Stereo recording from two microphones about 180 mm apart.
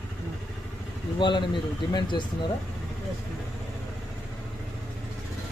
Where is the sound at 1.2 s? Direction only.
25° left (ahead or behind).